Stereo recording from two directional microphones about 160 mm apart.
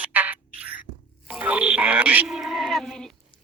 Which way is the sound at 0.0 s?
10° right (ahead or behind).